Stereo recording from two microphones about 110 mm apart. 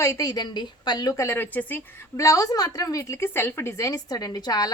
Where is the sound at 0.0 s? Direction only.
30° left (ahead or behind).